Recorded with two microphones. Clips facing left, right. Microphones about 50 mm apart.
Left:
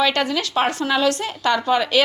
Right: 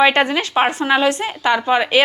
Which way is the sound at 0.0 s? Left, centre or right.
Right.